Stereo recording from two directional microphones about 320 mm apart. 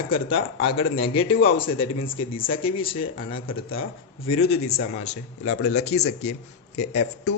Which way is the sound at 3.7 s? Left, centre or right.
Left.